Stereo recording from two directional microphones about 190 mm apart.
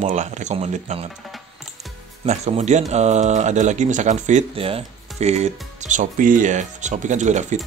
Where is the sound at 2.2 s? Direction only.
35° right (ahead or behind).